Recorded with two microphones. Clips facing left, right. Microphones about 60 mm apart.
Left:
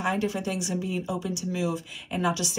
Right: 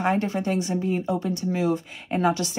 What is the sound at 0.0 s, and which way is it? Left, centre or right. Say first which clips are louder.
Speech: right 4 dB; right.